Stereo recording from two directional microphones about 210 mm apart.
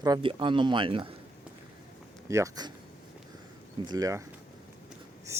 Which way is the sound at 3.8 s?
15° right (ahead or behind).